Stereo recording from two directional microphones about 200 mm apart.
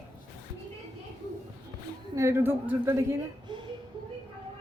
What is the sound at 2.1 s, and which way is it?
A woman's voice, 15° right (ahead or behind).